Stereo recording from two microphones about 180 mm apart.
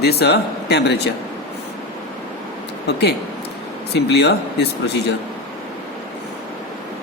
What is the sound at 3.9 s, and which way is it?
Speech, 70° left (ahead or behind).